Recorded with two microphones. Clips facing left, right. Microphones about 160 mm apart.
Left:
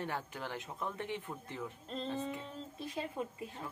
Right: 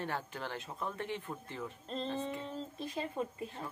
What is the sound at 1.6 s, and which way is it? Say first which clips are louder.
A woman's voice: right 2 dB; 5° left (ahead or behind).